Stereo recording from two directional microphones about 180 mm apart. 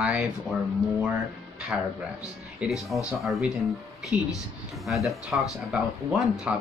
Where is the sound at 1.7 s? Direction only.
5° right (ahead or behind).